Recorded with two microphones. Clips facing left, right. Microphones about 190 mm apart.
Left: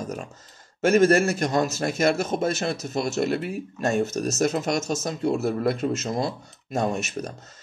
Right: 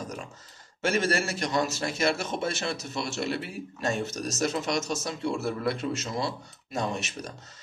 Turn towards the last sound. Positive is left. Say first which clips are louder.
# left 6 dB
turn(degrees=45)  # may be behind; listen again after turning